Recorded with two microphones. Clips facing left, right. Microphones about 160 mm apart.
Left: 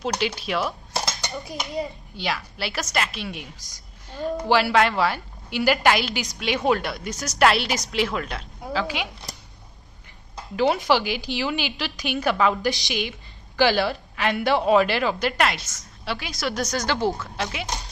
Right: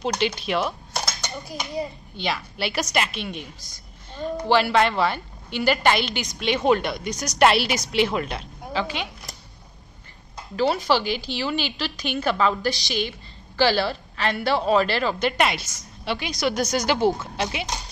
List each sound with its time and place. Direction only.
0.0 s a child's voice: 5° left (ahead or behind)
10.5 s a woman's voice: 20° left (ahead or behind); by 16.7 s centre (ahead or behind)
16.7 s speech: 15° right (ahead or behind)